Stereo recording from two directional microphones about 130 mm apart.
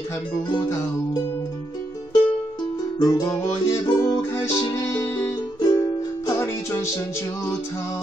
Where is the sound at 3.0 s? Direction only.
30° left (ahead or behind).